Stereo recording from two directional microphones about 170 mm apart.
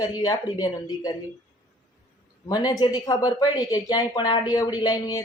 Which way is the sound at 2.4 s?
20° left (ahead or behind).